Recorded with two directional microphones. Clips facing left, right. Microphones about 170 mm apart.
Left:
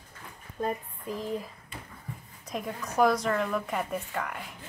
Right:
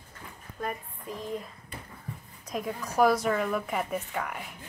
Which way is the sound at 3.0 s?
5° right (ahead or behind).